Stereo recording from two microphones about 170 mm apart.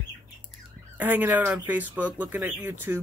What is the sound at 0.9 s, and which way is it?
Speech, 10° right (ahead or behind).